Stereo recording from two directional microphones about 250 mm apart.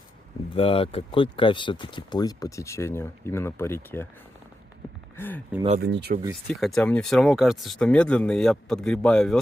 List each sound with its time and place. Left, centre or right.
0.5 s speech: left
5.1 s speech: centre
5.8 s speech: right
6.5 s speech: centre